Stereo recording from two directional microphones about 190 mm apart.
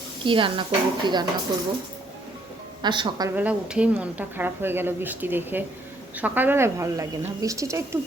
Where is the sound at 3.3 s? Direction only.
5° right (ahead or behind).